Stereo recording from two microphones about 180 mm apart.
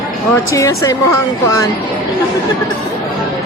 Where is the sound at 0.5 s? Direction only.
15° left (ahead or behind).